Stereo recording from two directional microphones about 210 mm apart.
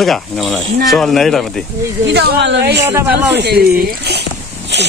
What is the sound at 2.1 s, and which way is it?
Speech, 55° right (ahead or behind).